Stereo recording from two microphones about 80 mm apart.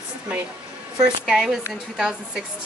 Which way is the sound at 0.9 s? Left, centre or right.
Right.